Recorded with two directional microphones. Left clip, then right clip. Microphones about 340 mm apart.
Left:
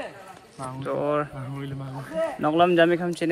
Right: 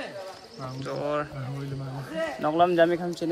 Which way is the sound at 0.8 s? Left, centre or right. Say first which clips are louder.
Left 4 dB; centre.